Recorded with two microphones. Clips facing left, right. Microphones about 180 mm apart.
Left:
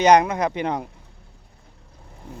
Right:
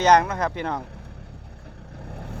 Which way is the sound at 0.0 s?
15° left (ahead or behind).